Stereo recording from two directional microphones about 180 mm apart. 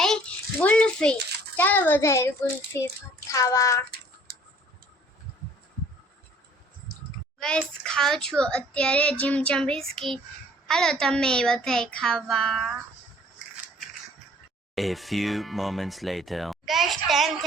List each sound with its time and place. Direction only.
0.0 s a sound: 5° left (ahead or behind)
1.5 s a child's voice: 10° left (ahead or behind)
3.3 s a child's voice: 15° left (ahead or behind)
7.3 s a child's voice: 5° left (ahead or behind)
14.8 s speech: centre (ahead or behind)